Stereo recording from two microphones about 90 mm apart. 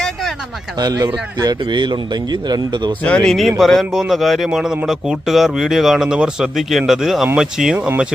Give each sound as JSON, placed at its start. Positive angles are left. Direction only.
{"t": 0.0, "sound": "a sound", "side_deg": 5}
{"t": 0.8, "sound": "a man's voice", "side_deg": -50}
{"t": 3.0, "sound": "speech", "side_deg": 15}
{"t": 3.6, "sound": "speech", "side_deg": 0}
{"t": 7.8, "sound": "speech", "side_deg": -20}